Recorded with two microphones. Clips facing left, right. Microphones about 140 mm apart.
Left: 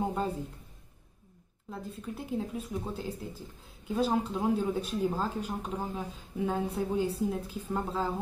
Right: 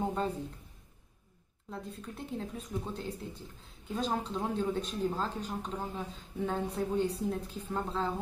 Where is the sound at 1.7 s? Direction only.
5° left (ahead or behind).